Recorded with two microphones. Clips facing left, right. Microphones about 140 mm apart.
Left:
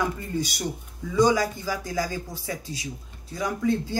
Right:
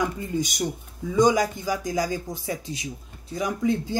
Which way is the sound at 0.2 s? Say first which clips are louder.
Right 2 dB; 20° right (ahead or behind).